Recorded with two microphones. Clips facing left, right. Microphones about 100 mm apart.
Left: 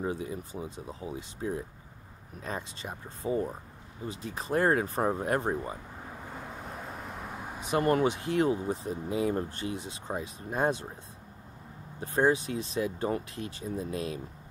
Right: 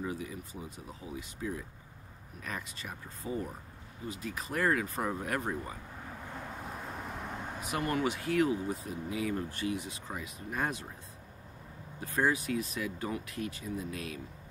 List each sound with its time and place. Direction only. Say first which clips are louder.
0.0 s speech: left 4 dB; 30° left (ahead or behind)
6.0 s vehicle: even; 10° left (ahead or behind)
7.6 s speech: left 7 dB; 25° left (ahead or behind)
12.0 s speech: left 5 dB; 25° left (ahead or behind)